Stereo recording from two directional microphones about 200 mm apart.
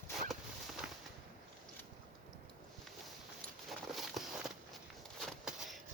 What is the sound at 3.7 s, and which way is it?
Walk, centre (ahead or behind).